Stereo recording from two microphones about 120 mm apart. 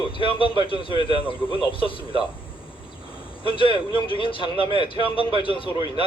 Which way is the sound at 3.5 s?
45° left (ahead or behind).